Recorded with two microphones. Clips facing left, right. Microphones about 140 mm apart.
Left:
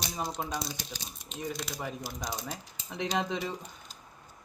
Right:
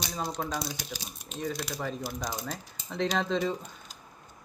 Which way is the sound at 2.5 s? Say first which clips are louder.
Right 3 dB; 15° left (ahead or behind).